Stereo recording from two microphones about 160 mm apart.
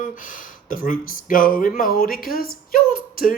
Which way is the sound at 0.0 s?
55° left (ahead or behind).